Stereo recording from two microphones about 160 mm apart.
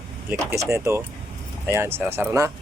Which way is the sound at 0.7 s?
20° right (ahead or behind).